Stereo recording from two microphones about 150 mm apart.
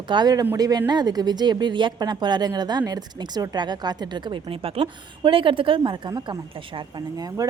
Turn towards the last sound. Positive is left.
turn(degrees=-25)  # may be behind; listen again after turning